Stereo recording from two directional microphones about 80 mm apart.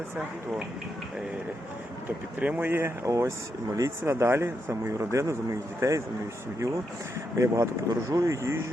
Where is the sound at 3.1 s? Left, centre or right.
Right.